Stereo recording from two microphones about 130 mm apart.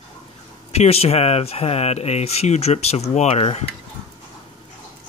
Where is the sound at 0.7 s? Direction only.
50° left (ahead or behind).